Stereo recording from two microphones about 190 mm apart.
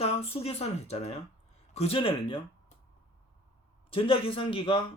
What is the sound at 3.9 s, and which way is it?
Speech, 30° left (ahead or behind).